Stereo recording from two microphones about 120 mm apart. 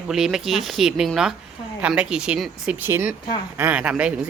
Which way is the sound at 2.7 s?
20° right (ahead or behind).